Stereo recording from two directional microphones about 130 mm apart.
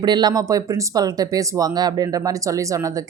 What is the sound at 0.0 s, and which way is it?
Speech, 35° right (ahead or behind).